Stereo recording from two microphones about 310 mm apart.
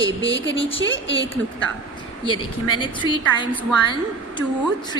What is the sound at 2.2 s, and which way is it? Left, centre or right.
A woman's voice, centre.